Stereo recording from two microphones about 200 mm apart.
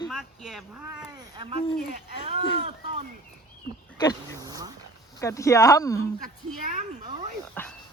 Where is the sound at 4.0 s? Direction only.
20° left (ahead or behind).